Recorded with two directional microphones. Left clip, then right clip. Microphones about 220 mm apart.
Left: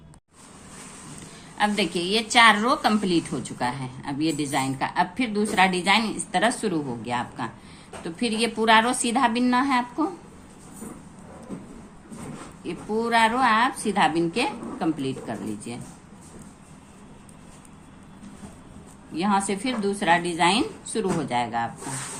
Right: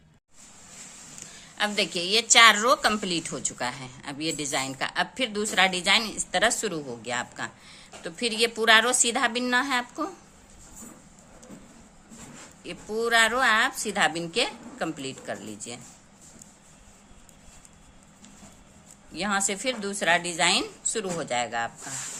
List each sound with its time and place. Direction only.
1.5 s a woman's voice: 30° right (ahead or behind)
12.6 s a woman's voice: 35° right (ahead or behind)
19.1 s a woman's voice: 35° right (ahead or behind)